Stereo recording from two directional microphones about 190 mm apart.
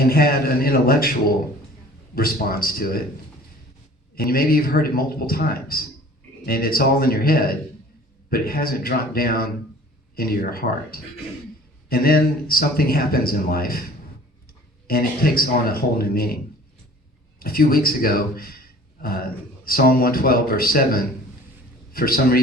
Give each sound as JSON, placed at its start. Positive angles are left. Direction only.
{"t": 0.0, "sound": "speech", "side_deg": 50}
{"t": 2.1, "sound": "speech", "side_deg": 50}
{"t": 4.1, "sound": "speech", "side_deg": 50}
{"t": 14.8, "sound": "speech", "side_deg": 50}
{"t": 17.4, "sound": "speech", "side_deg": 50}
{"t": 19.6, "sound": "speech", "side_deg": 50}